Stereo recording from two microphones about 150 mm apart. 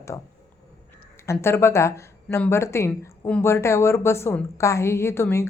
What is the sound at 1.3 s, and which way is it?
A woman's voice, 15° left (ahead or behind).